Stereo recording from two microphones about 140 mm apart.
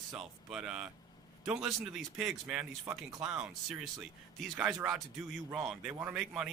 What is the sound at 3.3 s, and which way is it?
A man's voice, 5° right (ahead or behind).